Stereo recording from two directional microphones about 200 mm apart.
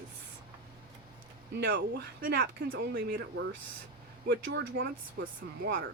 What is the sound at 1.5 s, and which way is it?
Speech, 55° right (ahead or behind).